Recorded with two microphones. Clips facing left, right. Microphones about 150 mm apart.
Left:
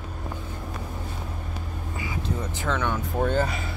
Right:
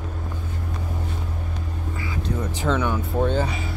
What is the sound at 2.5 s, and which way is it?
Speech, 15° right (ahead or behind).